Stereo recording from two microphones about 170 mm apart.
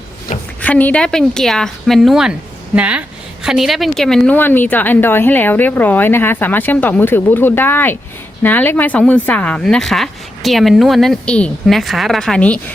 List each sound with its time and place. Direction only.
0.6 s a woman's voice: 10° left (ahead or behind)